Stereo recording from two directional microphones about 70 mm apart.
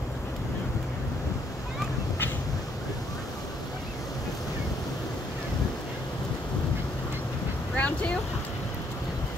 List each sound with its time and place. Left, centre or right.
7.7 s vehicle: centre